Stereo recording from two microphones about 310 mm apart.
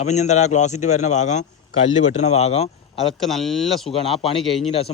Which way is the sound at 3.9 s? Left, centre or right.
Centre.